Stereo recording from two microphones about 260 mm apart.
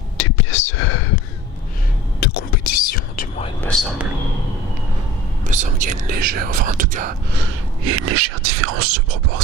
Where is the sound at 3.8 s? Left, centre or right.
Centre.